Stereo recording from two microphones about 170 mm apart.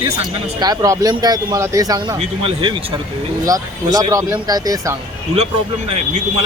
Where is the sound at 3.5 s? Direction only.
20° right (ahead or behind).